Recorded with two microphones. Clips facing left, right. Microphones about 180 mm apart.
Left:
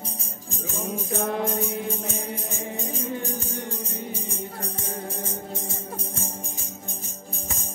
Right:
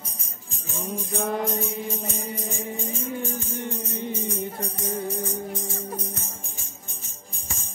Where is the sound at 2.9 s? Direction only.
40° left (ahead or behind).